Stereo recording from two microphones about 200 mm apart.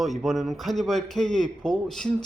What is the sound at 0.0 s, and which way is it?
A man's voice, centre (ahead or behind).